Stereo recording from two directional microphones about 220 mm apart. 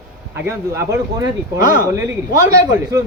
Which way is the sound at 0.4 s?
15° right (ahead or behind).